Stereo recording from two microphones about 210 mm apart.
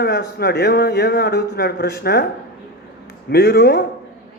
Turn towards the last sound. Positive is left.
turn(degrees=50)  # may be behind; listen again after turning